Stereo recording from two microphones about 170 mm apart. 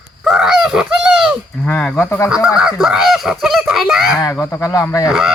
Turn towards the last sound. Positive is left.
turn(degrees=0)  # may be behind; listen again after turning